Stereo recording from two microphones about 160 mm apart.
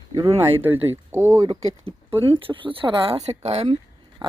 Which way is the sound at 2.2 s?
30° right (ahead or behind).